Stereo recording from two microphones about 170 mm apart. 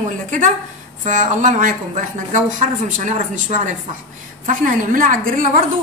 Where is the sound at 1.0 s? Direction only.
50° right (ahead or behind).